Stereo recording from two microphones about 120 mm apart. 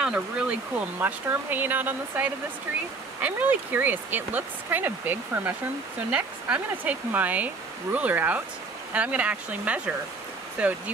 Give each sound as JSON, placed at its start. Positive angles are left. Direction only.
{"t": 0.0, "sound": "speech", "side_deg": -5}